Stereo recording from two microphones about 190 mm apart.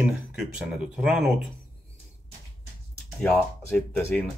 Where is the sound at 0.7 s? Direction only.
5° right (ahead or behind).